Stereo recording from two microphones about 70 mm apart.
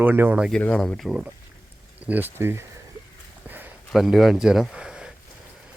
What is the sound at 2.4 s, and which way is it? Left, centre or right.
Speech, right.